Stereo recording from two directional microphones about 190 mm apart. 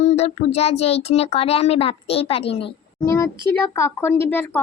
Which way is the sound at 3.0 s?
15° left (ahead or behind).